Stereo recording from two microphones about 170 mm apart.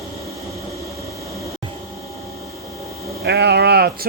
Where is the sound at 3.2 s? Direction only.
75° right (ahead or behind).